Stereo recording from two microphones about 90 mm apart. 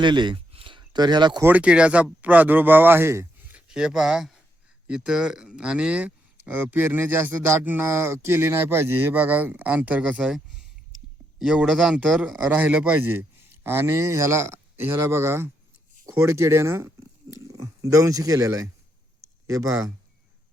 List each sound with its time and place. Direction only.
0.0 s speech: 60° right (ahead or behind)
1.4 s a man's voice: 20° right (ahead or behind)
3.5 s speech: 10° right (ahead or behind)
10.3 s a sound: centre (ahead or behind)
11.3 s a man's voice: 5° right (ahead or behind); by 18.6 s 40° right (ahead or behind)
19.6 s a man's voice: 20° right (ahead or behind)